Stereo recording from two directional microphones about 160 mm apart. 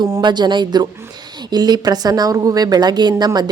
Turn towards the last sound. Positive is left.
turn(degrees=-25)  # may be behind; listen again after turning